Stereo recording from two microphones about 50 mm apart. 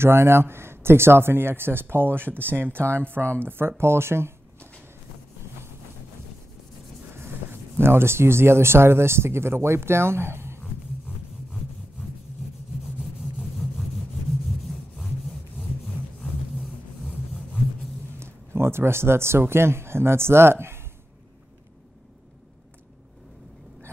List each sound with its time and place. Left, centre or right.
0.0 s speech: right
7.8 s speech: right
13.2 s vehicle: centre
16.2 s vehicle: centre
18.2 s speech: right